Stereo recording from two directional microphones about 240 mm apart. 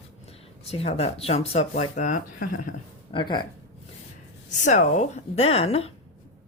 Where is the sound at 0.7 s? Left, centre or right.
Left.